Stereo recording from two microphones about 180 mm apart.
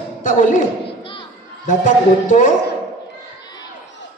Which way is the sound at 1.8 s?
45° left (ahead or behind).